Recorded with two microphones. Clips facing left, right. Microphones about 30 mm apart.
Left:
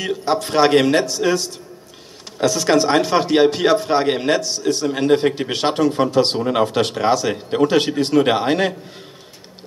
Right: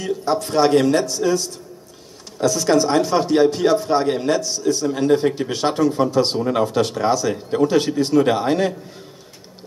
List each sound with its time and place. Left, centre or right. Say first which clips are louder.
0.0 s a man's voice: left 1 dB; left